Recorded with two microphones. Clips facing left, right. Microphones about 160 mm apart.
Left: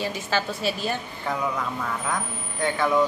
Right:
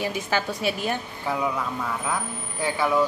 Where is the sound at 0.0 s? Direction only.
15° right (ahead or behind).